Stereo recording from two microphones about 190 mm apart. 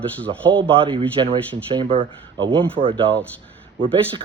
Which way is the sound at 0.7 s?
25° right (ahead or behind).